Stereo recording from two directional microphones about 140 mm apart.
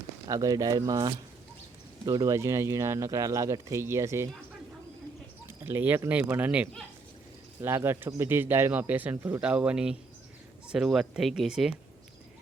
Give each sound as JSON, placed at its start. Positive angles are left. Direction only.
{"t": 0.3, "sound": "speech", "side_deg": -25}
{"t": 5.5, "sound": "speech", "side_deg": -15}